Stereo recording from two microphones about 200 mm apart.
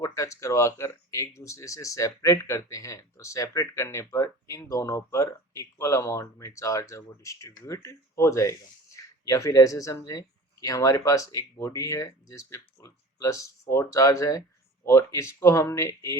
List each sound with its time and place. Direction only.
0.0 s speech: 15° left (ahead or behind)